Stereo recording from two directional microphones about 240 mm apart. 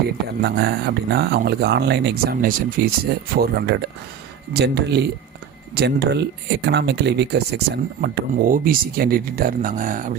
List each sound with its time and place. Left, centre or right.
0.4 s speech: right